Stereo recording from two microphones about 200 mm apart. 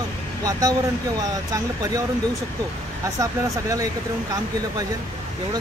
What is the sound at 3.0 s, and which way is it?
Speech, 15° right (ahead or behind).